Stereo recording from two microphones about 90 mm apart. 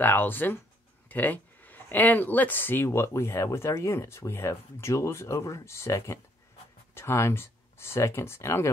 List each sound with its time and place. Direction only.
0.0 s speech: 20° left (ahead or behind)